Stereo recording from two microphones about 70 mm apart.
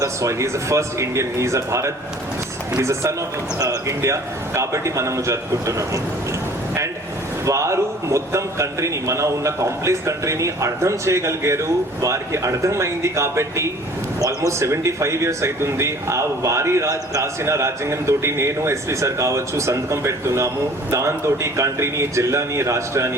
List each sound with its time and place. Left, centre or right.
0.0 s speech: right
7.4 s speech: right